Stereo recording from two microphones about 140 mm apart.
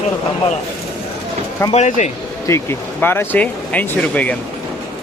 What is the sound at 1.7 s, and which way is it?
Speech, 55° left (ahead or behind).